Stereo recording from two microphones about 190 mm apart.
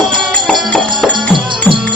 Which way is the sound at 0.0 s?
25° right (ahead or behind).